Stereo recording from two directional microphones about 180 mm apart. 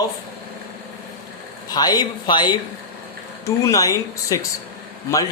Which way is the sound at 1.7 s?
20° left (ahead or behind).